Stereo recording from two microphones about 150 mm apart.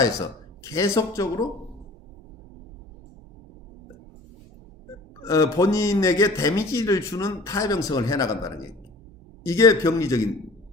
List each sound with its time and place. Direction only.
0.6 s a man's voice: 20° left (ahead or behind)
5.2 s a man's voice: 20° left (ahead or behind)